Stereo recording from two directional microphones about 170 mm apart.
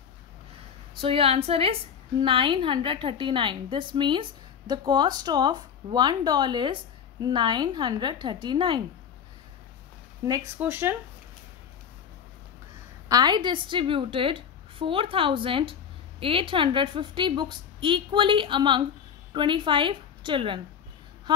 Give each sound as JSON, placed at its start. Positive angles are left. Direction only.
{"t": 1.0, "sound": "a woman's voice", "side_deg": -35}
{"t": 10.6, "sound": "speech", "side_deg": -15}
{"t": 13.1, "sound": "a woman's voice", "side_deg": -25}